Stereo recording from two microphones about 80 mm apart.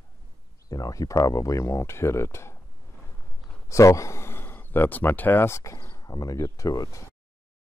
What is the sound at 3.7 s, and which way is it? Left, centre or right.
Speech, left.